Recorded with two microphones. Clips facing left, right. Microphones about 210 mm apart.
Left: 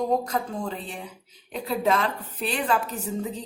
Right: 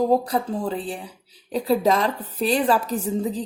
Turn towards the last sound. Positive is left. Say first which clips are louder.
# right 6 dB
turn(degrees=-35)  # may be behind; listen again after turning